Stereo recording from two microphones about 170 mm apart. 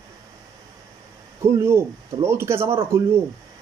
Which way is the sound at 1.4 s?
15° right (ahead or behind).